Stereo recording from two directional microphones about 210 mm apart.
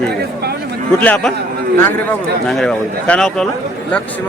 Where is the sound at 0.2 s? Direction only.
50° right (ahead or behind).